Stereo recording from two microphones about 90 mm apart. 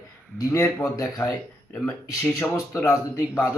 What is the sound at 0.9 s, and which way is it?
Speech, 45° left (ahead or behind).